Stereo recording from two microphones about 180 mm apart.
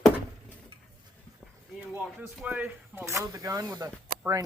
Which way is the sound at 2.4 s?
10° right (ahead or behind).